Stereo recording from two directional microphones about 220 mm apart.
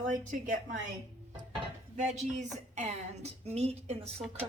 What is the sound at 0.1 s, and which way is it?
Speech, 35° right (ahead or behind).